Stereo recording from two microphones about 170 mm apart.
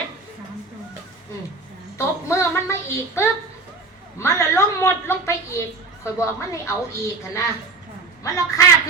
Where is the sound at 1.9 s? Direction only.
15° left (ahead or behind).